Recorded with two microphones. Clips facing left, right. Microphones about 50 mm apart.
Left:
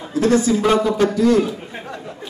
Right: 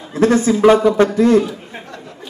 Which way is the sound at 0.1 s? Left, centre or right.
Right.